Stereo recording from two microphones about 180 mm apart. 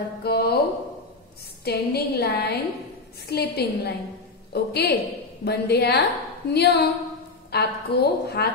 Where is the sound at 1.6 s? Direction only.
65° left (ahead or behind).